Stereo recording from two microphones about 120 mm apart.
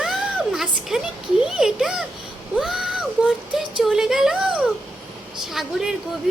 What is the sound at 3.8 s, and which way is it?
A child's voice, 5° right (ahead or behind).